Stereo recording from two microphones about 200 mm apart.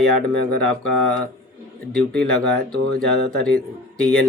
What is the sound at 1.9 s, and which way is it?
Speech, 5° left (ahead or behind).